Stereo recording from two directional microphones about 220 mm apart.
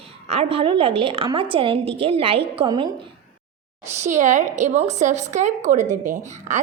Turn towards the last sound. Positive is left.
turn(degrees=-35)  # may be behind; listen again after turning